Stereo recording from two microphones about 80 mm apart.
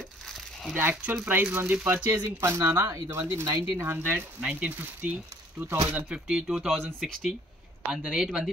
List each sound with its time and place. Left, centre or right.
0.3 s crumpling: centre
0.7 s speech: right
2.2 s speech: right
3.7 s speech: right
4.4 s speech: centre
7.9 s speech: centre